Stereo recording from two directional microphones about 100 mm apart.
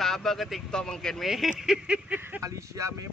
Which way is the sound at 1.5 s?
10° right (ahead or behind).